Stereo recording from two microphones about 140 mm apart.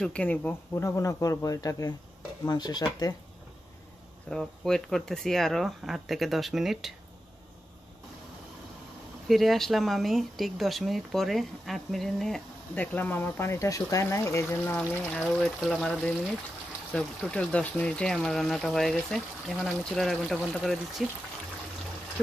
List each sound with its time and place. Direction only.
0.0 s speech: 10° left (ahead or behind); by 2.8 s 30° left (ahead or behind)
4.3 s speech: 5° left (ahead or behind)
9.3 s speech: centre (ahead or behind)